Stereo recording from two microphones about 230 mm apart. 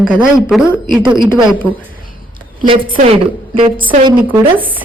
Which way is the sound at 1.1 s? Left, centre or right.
Centre.